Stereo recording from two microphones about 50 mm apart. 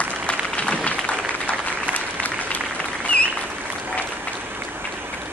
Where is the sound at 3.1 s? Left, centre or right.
Left.